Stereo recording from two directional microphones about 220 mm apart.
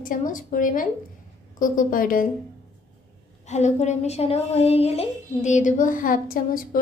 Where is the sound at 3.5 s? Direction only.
30° left (ahead or behind).